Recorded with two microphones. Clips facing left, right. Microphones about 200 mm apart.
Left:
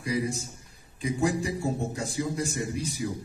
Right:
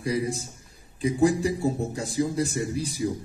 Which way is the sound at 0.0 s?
30° right (ahead or behind).